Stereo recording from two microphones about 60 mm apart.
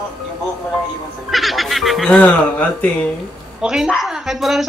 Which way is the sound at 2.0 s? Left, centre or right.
Left.